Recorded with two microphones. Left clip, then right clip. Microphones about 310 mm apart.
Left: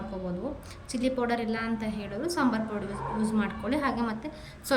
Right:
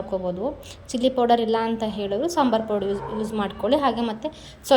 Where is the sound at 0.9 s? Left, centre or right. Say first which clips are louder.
Right 9 dB; centre.